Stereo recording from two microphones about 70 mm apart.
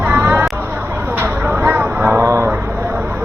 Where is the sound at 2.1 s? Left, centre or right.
Right.